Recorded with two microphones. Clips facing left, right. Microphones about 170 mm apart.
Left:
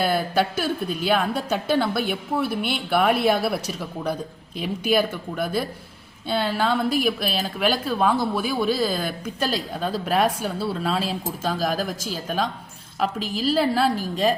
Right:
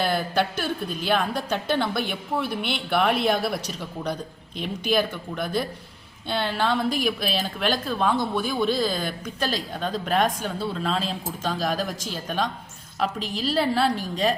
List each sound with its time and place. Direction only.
0.0 s a woman's voice: 5° left (ahead or behind)